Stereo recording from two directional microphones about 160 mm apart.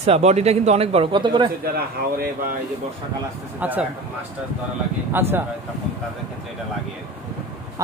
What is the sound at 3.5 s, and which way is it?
Speech, 10° right (ahead or behind).